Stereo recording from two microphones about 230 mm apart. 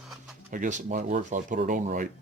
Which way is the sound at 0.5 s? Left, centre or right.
Right.